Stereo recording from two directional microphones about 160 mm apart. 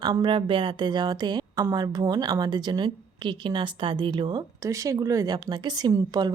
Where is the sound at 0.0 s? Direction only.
30° right (ahead or behind).